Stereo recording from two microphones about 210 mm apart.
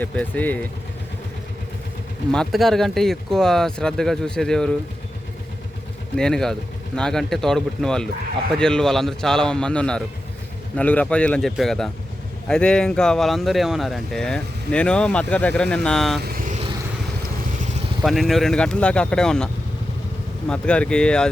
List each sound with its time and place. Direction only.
0.0 s speech: 10° left (ahead or behind)
2.3 s speech: centre (ahead or behind)
6.1 s speech: 5° left (ahead or behind)
16.2 s vehicle: 40° right (ahead or behind)
18.0 s speech: centre (ahead or behind)
20.5 s speech: 5° left (ahead or behind)